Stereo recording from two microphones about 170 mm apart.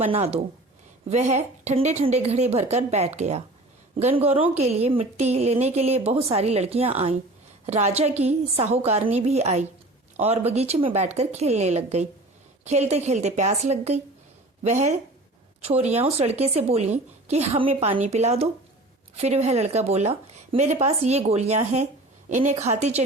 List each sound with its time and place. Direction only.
0.0 s a woman's voice: 35° right (ahead or behind)